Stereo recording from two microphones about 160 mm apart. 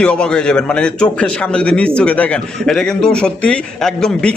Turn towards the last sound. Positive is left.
turn(degrees=5)  # may be behind; listen again after turning